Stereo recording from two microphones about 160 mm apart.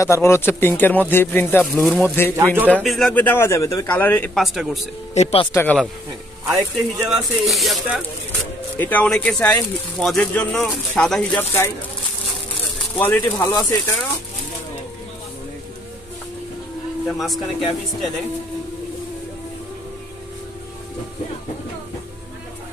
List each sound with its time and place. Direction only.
0.0 s speech: 15° left (ahead or behind)
1.8 s speech: centre (ahead or behind)
2.3 s a man's voice: 15° right (ahead or behind)
2.7 s speech: centre (ahead or behind)
3.2 s speech: 15° left (ahead or behind)
4.4 s speech: centre (ahead or behind)
5.1 s speech: 40° left (ahead or behind)
5.5 s speech: 15° left (ahead or behind)
6.4 s speech: centre (ahead or behind)
8.7 s speech: 10° left (ahead or behind)
12.9 s speech: 10° left (ahead or behind)
13.2 s speech: 25° left (ahead or behind)
17.2 s speech: centre (ahead or behind)